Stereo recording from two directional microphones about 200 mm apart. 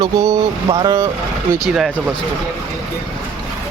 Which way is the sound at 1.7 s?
Centre (ahead or behind).